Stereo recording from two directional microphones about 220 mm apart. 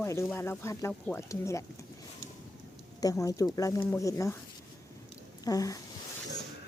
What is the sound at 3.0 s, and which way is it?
Speech, 15° left (ahead or behind).